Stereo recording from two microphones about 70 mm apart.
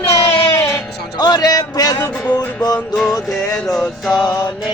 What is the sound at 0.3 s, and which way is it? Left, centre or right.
Music, left.